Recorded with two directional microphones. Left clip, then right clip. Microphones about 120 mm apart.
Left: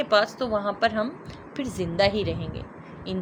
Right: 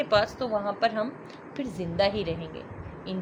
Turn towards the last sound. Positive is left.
turn(degrees=40)  # may be behind; listen again after turning